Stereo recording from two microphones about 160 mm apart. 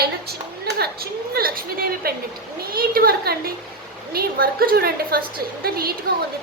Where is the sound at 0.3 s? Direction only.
80° right.